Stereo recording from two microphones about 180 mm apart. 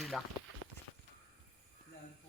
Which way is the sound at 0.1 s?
Centre (ahead or behind).